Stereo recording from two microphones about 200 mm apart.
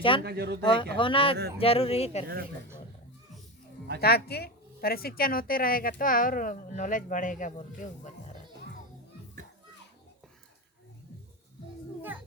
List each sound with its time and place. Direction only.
0.2 s speech: 55° right (ahead or behind)
0.6 s speech: 25° left (ahead or behind)
2.2 s speech: 50° right (ahead or behind)
4.0 s a woman's voice: 50° left (ahead or behind); by 8.1 s 35° left (ahead or behind)